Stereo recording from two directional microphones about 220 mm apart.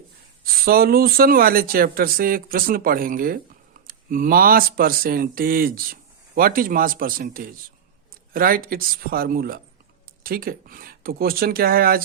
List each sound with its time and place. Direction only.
0.4 s speech: 40° right (ahead or behind)